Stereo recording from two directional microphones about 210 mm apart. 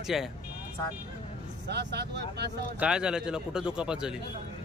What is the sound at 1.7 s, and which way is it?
Speech, 50° right (ahead or behind).